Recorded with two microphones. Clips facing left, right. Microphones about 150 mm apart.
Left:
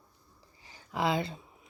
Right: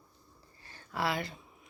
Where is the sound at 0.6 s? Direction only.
15° left (ahead or behind).